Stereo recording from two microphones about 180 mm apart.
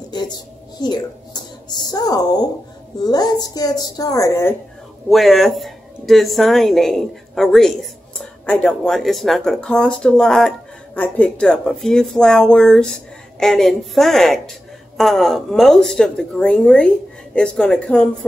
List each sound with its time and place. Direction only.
0.7 s a woman's voice: 25° left (ahead or behind)
5.1 s speech: centre (ahead or behind)